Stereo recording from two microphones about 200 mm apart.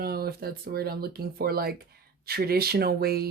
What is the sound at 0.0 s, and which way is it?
Speech, 50° right (ahead or behind).